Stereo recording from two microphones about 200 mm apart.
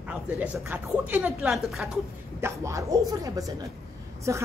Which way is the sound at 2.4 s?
15° right (ahead or behind).